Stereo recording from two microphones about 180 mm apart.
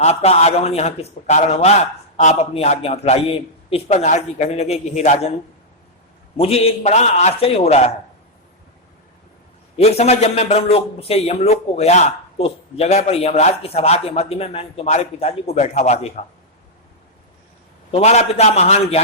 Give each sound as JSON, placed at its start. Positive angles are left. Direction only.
{"t": 0.0, "sound": "a man's voice", "side_deg": 35}
{"t": 6.3, "sound": "a man's voice", "side_deg": 35}
{"t": 9.7, "sound": "a man's voice", "side_deg": 35}
{"t": 17.9, "sound": "a man's voice", "side_deg": 35}